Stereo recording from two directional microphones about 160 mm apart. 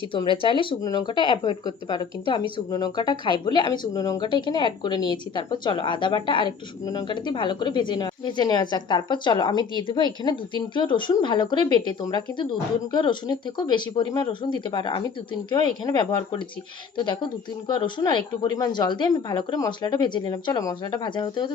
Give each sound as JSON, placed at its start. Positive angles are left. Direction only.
{"t": 0.1, "sound": "speech", "side_deg": 30}